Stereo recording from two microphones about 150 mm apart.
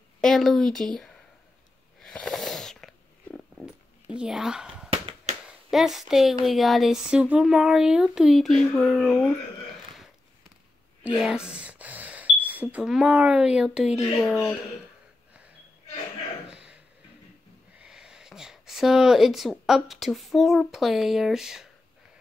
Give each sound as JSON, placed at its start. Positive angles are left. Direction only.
{"t": 0.2, "sound": "speech", "side_deg": 0}
{"t": 2.0, "sound": "sneeze", "side_deg": 5}
{"t": 4.1, "sound": "speech", "side_deg": -5}
{"t": 4.8, "sound": "a sound", "side_deg": -40}
{"t": 5.7, "sound": "speech", "side_deg": 0}
{"t": 11.1, "sound": "speech", "side_deg": -5}
{"t": 16.4, "sound": "a sound", "side_deg": -5}
{"t": 17.7, "sound": "speech", "side_deg": -5}